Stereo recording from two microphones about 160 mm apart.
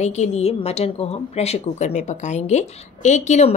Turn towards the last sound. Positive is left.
turn(degrees=45)  # may be behind; listen again after turning